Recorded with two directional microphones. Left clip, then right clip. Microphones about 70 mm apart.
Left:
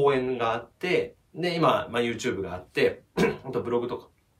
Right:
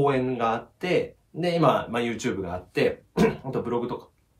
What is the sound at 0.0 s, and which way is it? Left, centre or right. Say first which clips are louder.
Speech: even; right.